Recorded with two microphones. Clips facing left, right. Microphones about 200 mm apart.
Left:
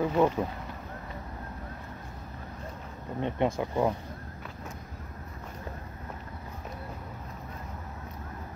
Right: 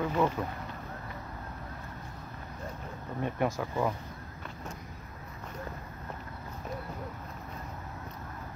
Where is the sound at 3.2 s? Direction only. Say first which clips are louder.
Left 3 dB; 20° left (ahead or behind).